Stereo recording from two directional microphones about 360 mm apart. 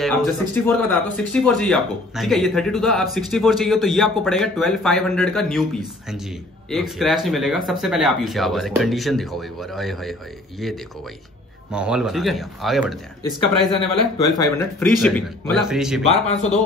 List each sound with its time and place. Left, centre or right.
0.0 s speech: centre
6.7 s speech: centre
11.7 s speech: centre
16.1 s speech: centre